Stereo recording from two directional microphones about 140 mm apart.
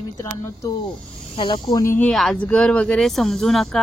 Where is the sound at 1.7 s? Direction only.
20° left (ahead or behind).